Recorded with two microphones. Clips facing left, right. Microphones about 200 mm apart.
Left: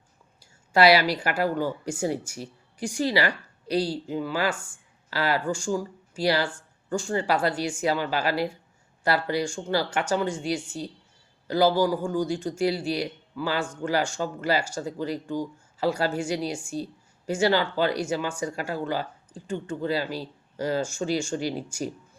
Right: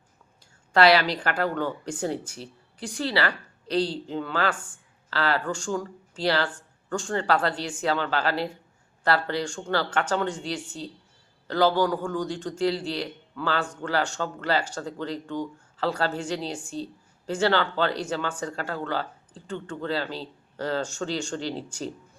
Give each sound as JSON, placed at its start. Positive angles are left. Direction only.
{"t": 0.7, "sound": "a man's voice", "side_deg": 10}